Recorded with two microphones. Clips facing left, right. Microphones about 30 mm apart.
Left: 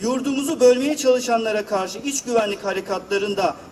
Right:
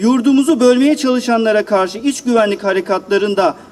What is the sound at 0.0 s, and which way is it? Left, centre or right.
A man's voice, right.